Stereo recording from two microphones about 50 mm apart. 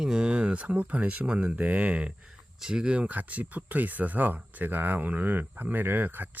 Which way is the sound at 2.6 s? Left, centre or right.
Centre.